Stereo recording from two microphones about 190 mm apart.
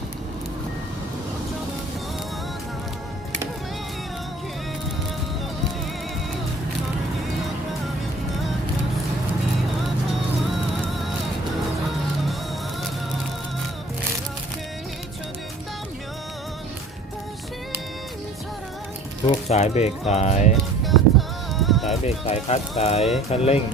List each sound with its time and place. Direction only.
10.4 s music: centre (ahead or behind)
19.3 s speech: 35° left (ahead or behind)
20.8 s music: centre (ahead or behind)
22.0 s speech: 35° left (ahead or behind)